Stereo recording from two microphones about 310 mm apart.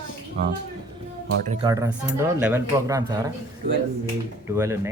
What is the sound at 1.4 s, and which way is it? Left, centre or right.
Speech, centre.